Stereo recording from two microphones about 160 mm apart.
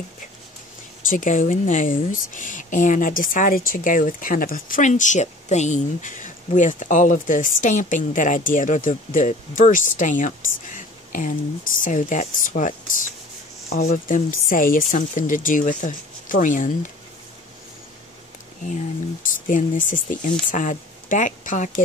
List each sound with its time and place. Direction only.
1.0 s speech: 55° left (ahead or behind)
19.2 s speech: 55° left (ahead or behind)